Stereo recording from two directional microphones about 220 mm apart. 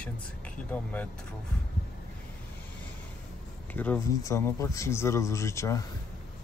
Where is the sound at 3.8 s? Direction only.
10° left (ahead or behind).